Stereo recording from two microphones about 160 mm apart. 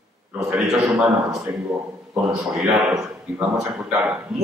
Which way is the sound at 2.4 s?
Centre (ahead or behind).